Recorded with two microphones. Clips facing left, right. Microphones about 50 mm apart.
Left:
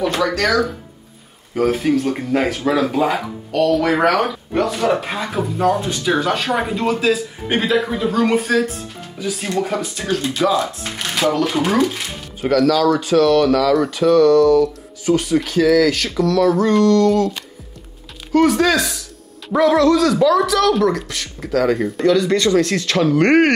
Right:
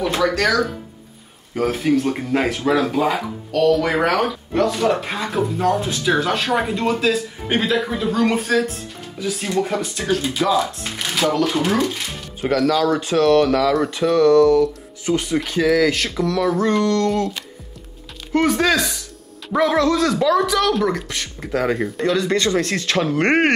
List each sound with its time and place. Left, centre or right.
0.0 s speech: centre
12.6 s speech: right; by 16.8 s centre
16.8 s speech: centre
17.1 s speech: centre
20.3 s speech: centre
21.7 s speech: centre
22.1 s speech: right